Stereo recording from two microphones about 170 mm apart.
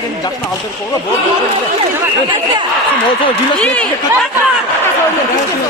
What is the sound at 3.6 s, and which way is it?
Speech, 5° left (ahead or behind).